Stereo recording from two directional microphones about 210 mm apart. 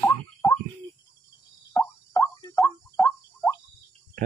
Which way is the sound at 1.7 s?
10° left (ahead or behind).